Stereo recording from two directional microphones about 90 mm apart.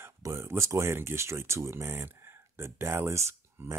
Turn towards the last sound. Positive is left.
turn(degrees=-30)  # may be behind; listen again after turning